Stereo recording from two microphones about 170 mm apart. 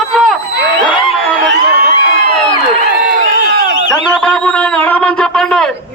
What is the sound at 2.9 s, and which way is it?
Crowd, 65° right (ahead or behind).